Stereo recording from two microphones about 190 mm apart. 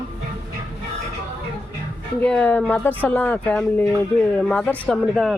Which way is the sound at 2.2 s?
5° left (ahead or behind).